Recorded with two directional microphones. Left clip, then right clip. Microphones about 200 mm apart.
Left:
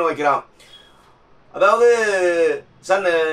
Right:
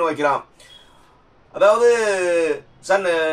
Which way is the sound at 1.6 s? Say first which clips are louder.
Even; 10° right (ahead or behind).